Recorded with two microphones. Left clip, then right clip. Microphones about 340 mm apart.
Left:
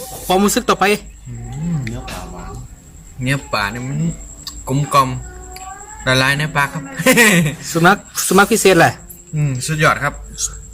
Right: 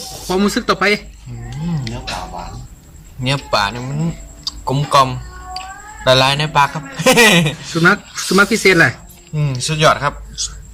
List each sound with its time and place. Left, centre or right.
0.3 s speech: centre
3.2 s a man's voice: centre
7.8 s speech: centre
9.3 s speech: centre